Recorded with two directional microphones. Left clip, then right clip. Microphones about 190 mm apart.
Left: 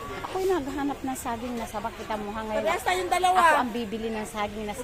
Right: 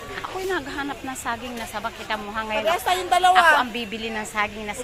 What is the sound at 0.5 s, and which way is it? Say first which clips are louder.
Speech: right 1 dB; 25° left (ahead or behind).